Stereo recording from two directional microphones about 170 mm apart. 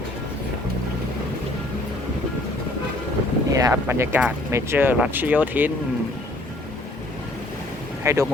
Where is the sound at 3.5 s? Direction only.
15° right (ahead or behind).